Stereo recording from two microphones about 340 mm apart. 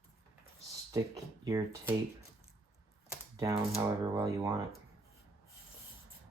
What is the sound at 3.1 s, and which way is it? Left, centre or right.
Typing, centre.